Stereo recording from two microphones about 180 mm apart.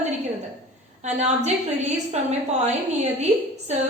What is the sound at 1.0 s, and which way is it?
A woman's voice, 40° right (ahead or behind).